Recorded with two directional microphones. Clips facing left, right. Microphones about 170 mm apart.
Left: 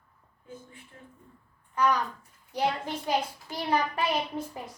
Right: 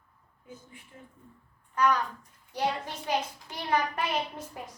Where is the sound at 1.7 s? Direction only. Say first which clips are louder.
Even; 10° left (ahead or behind).